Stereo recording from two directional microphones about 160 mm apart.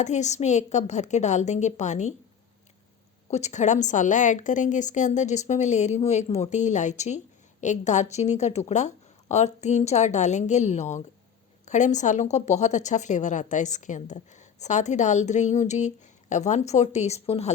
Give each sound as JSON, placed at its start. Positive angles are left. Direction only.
{"t": 0.0, "sound": "a woman's voice", "side_deg": 45}
{"t": 3.2, "sound": "a woman's voice", "side_deg": 45}